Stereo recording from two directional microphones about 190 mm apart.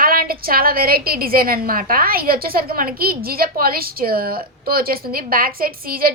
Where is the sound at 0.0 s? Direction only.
50° right (ahead or behind).